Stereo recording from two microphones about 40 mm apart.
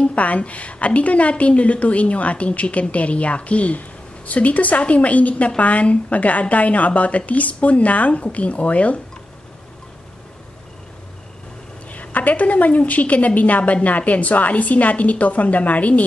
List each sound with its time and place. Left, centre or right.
0.0 s a woman's voice: left
11.9 s a woman's voice: left